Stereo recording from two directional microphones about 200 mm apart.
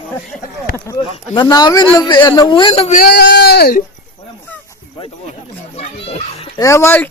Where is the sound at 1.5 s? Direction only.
20° left (ahead or behind).